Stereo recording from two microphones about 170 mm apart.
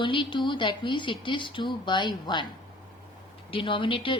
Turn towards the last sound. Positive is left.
turn(degrees=30)  # may be behind; listen again after turning